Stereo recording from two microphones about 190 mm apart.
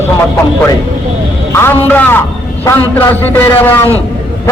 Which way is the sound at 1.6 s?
10° left (ahead or behind).